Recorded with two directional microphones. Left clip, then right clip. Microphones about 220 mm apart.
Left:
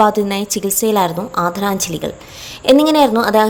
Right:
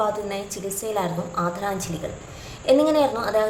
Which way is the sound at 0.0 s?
45° left (ahead or behind).